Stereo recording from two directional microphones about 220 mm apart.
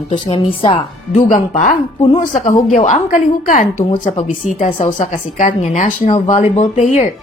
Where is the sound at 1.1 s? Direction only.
35° left (ahead or behind).